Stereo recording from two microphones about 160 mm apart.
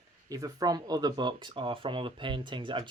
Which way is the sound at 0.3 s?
20° right (ahead or behind).